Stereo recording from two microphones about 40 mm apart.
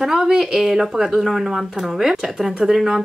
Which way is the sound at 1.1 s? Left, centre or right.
Centre.